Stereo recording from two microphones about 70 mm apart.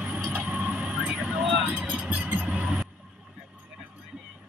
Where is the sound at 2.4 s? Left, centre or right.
Centre.